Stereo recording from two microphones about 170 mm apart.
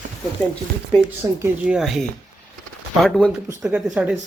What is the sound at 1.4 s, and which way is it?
Speech, 5° right (ahead or behind).